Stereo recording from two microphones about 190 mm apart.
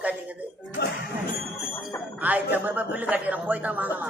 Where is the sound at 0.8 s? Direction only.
60° left (ahead or behind).